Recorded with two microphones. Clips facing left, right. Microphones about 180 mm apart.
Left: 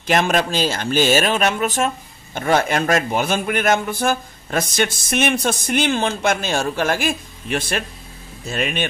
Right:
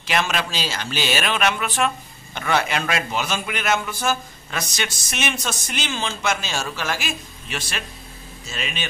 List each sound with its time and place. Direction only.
0.0 s a man's voice: 50° left (ahead or behind)